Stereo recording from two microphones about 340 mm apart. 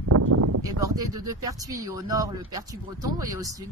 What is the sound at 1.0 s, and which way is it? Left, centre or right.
A woman's voice, centre.